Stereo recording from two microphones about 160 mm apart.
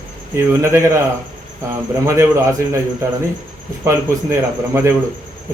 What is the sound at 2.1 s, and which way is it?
Speech, 20° right (ahead or behind).